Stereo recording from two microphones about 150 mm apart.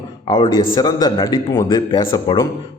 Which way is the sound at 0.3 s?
40° left (ahead or behind).